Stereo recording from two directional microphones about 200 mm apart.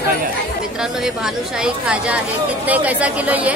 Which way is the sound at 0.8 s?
Centre (ahead or behind).